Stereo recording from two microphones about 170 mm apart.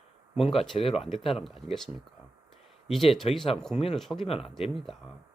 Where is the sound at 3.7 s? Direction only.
35° left (ahead or behind).